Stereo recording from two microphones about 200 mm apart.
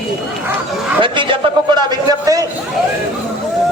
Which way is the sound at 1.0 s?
25° right (ahead or behind).